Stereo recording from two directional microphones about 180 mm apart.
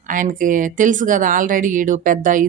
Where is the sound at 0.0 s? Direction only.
45° right (ahead or behind).